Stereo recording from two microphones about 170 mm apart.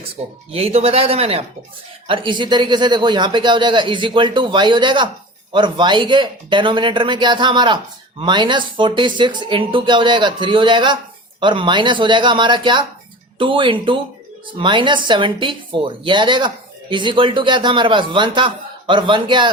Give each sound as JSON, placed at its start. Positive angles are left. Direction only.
{"t": 0.2, "sound": "speech", "side_deg": -40}